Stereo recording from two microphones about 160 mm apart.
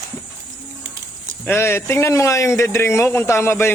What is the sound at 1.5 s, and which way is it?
A man's voice, 15° left (ahead or behind).